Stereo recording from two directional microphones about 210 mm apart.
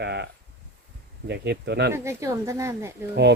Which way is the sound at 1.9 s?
15° right (ahead or behind).